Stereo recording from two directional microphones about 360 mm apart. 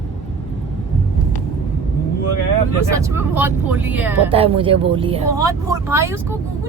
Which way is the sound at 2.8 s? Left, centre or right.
Centre.